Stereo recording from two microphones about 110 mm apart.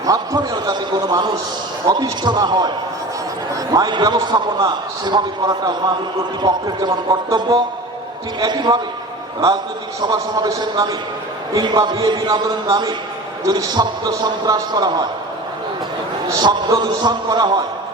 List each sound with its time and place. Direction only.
0.0 s a man's voice: 35° right (ahead or behind)
10.0 s a man's voice: 40° right (ahead or behind)
16.3 s a man's voice: 35° right (ahead or behind)